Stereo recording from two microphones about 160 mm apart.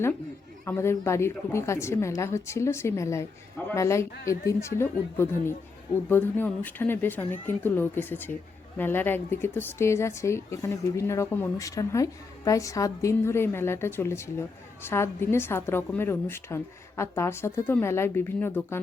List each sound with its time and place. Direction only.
0.6 s speech: 15° left (ahead or behind)